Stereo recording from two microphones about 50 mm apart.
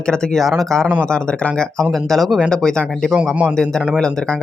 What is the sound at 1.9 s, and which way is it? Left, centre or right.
Speech, centre.